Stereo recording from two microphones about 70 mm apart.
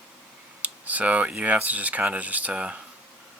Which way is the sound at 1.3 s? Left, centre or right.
Centre.